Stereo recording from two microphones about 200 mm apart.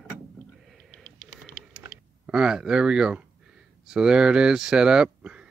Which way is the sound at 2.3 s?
5° right (ahead or behind).